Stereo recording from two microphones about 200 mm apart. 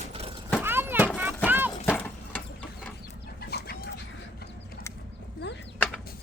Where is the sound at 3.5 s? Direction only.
55° left (ahead or behind).